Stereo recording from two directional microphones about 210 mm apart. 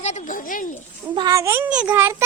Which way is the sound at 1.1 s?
20° right (ahead or behind).